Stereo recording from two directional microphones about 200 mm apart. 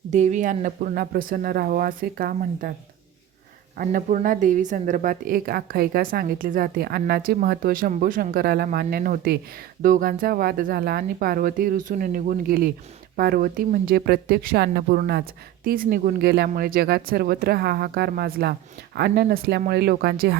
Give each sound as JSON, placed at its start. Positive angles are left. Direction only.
{"t": 0.1, "sound": "speech", "side_deg": -35}
{"t": 3.8, "sound": "speech", "side_deg": -40}